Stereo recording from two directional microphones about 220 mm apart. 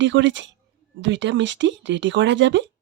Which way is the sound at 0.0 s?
55° right (ahead or behind).